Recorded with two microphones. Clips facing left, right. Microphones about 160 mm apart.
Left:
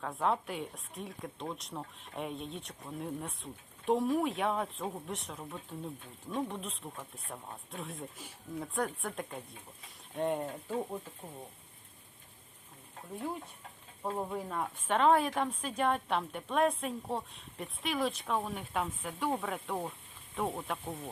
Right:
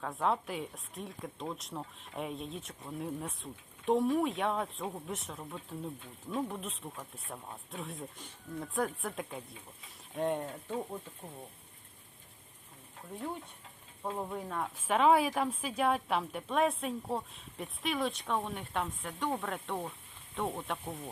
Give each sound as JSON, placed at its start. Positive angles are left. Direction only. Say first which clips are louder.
{"t": 0.0, "sound": "speech", "louder": "even", "side_deg": 0}
{"t": 14.0, "sound": "speech", "louder": "left 1 dB", "side_deg": 5}